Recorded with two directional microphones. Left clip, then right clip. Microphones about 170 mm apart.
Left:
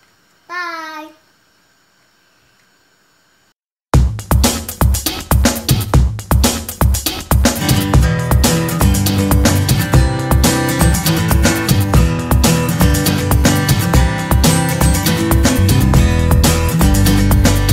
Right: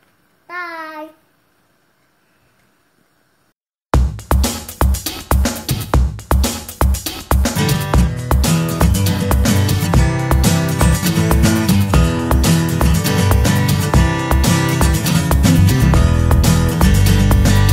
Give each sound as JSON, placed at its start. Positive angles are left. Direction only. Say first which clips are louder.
{"t": 0.5, "sound": "child singing", "louder": "left 3 dB", "side_deg": 0}
{"t": 3.9, "sound": "music", "louder": "left 1 dB", "side_deg": 0}